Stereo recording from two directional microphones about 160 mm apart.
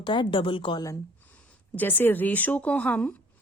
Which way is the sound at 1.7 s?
10° left (ahead or behind).